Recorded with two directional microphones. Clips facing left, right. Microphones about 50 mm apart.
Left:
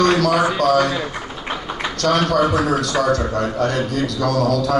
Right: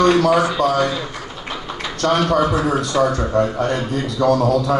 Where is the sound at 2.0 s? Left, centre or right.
Right.